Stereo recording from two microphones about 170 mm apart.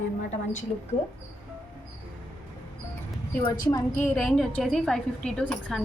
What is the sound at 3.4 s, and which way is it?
Speech, 20° left (ahead or behind).